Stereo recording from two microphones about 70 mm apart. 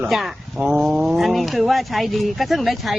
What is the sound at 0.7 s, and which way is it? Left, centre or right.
Speech, centre.